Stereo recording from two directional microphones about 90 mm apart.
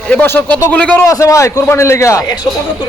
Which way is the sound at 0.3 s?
20° left (ahead or behind).